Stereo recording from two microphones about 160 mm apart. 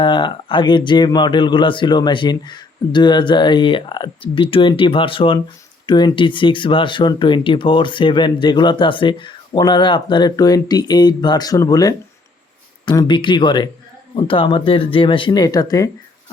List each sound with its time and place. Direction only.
0.0 s speech: 30° left (ahead or behind)